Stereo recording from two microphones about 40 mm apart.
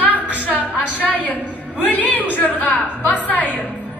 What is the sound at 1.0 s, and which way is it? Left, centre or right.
A woman's voice, left.